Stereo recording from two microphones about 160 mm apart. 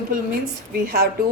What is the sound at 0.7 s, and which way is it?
Speech, 75° right (ahead or behind).